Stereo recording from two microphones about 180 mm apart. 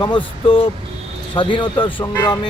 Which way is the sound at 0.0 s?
30° left (ahead or behind).